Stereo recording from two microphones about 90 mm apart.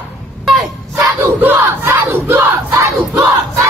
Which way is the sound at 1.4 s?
25° right (ahead or behind).